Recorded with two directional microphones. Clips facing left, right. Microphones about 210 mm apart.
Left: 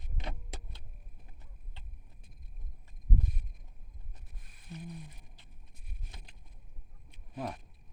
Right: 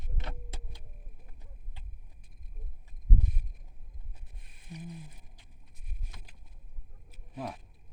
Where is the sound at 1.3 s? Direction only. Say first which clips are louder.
Right 2 dB; 10° right (ahead or behind).